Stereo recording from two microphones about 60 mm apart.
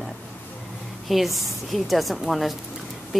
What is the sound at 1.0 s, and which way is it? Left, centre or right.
A woman's voice, centre.